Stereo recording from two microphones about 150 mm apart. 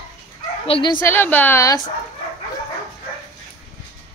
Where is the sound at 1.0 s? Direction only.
15° left (ahead or behind).